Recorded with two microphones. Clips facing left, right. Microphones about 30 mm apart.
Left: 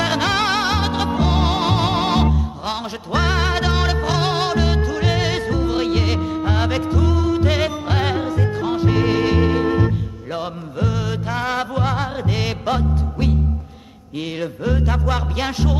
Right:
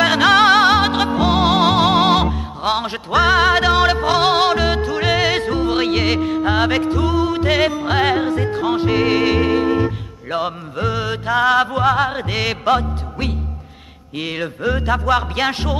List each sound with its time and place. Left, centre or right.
0.0 s music: right
0.3 s music: right
4.4 s music: right
12.4 s music: right